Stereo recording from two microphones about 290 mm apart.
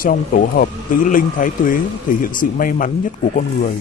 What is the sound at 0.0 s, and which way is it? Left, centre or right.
A man's voice, left.